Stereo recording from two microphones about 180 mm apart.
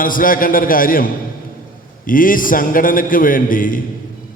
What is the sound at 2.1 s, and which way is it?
A man's voice, 50° left (ahead or behind).